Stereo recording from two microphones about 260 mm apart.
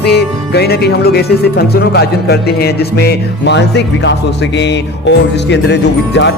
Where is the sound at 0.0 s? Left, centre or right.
Left.